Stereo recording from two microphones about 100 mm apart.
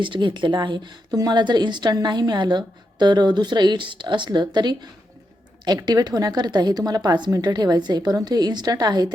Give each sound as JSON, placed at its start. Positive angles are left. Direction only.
{"t": 0.0, "sound": "speech", "side_deg": -55}